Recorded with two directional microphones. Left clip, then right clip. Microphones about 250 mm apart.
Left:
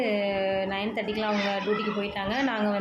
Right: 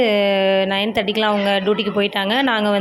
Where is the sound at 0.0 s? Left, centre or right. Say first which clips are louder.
Right 11 dB; right.